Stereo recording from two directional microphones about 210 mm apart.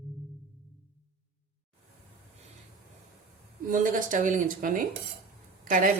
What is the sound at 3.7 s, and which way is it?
Speech, 40° right (ahead or behind).